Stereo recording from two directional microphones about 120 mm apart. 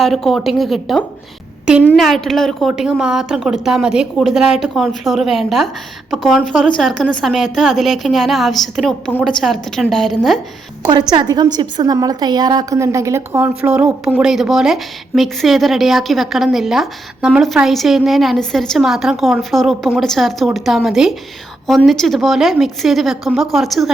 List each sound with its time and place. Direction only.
0.0 s a woman's voice: centre (ahead or behind)
2.0 s a woman's voice: centre (ahead or behind)
10.8 s a woman's voice: 35° right (ahead or behind)
13.4 s a woman's voice: 15° right (ahead or behind)